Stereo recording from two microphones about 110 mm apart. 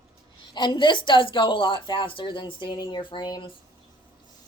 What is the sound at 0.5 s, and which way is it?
Speech, 45° left (ahead or behind).